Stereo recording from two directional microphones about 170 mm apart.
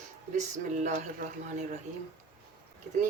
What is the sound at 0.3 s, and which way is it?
Speech, 45° right (ahead or behind).